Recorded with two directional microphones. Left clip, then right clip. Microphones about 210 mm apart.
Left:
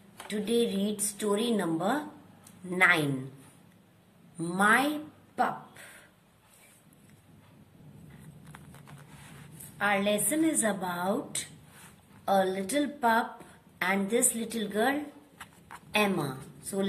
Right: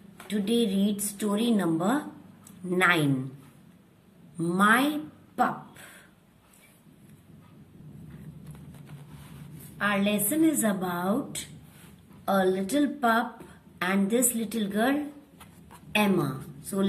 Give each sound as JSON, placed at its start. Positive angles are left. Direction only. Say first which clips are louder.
{"t": 0.3, "sound": "a woman's voice", "louder": "right 1 dB", "side_deg": 5}
{"t": 4.4, "sound": "a sound", "louder": "right 2 dB", "side_deg": 5}
{"t": 9.8, "sound": "a woman's voice", "louder": "even", "side_deg": 5}